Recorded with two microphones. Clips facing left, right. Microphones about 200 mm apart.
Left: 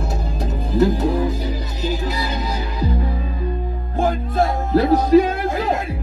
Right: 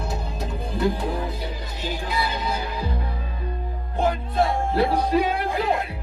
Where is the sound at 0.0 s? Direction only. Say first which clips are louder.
Left 4 dB; 45° left (ahead or behind).